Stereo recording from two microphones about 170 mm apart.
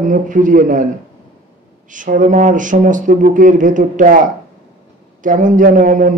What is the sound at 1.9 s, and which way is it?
Speech, 50° right (ahead or behind).